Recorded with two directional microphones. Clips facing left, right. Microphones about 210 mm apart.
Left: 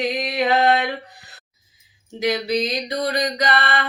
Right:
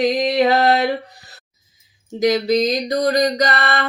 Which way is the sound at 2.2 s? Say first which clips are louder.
Right 5 dB; 40° right (ahead or behind).